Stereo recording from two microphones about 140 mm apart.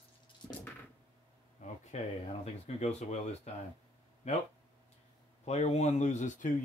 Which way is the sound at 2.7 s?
50° left (ahead or behind).